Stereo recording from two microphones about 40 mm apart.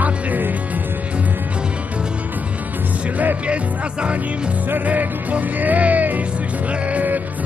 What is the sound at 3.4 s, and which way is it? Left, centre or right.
Music, right.